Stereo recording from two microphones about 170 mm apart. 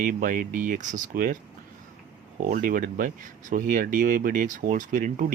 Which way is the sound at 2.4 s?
55° right (ahead or behind).